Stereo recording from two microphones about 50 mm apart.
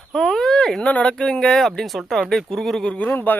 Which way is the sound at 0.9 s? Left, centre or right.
Left.